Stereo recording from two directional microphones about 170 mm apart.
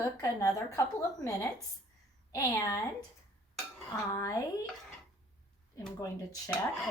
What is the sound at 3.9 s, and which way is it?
Speech, 20° left (ahead or behind).